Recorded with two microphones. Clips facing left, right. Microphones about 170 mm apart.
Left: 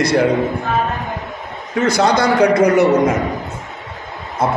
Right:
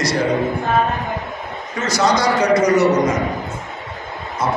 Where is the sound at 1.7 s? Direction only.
60° left (ahead or behind).